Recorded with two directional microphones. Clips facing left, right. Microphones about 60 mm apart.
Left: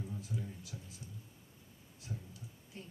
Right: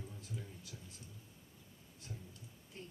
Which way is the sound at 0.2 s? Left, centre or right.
Centre.